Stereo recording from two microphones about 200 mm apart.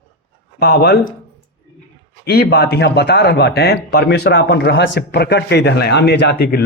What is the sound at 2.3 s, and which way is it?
A man's voice, 55° left (ahead or behind).